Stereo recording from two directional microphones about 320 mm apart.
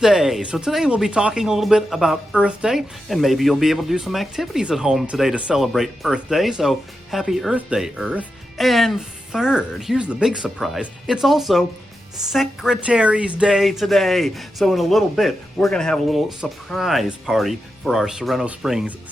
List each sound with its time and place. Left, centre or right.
0.0 s speech: centre